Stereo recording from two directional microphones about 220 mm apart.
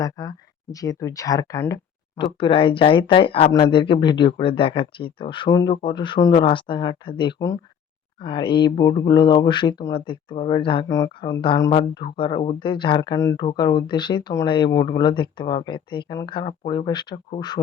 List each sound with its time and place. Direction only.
0.0 s speech: 15° left (ahead or behind)